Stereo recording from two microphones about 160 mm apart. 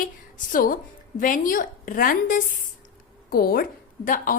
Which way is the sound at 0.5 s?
60° left (ahead or behind).